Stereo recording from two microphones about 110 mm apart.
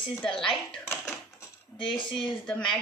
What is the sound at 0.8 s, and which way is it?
Tap, 25° left (ahead or behind).